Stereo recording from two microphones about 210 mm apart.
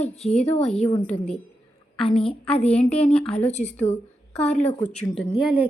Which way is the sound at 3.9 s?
30° left (ahead or behind).